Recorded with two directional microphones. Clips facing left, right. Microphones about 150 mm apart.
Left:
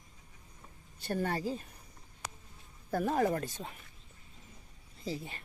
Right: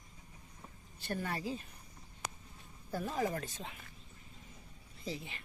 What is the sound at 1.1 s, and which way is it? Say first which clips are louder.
Speech: left 6 dB; 35° left (ahead or behind).